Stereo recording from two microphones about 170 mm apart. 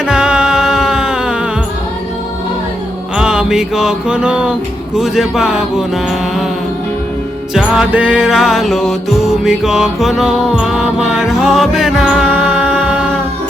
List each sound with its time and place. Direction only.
0.0 s music: 5° right (ahead or behind)
3.2 s mantra: 5° right (ahead or behind)
4.9 s speech: centre (ahead or behind)
7.5 s music: 5° right (ahead or behind)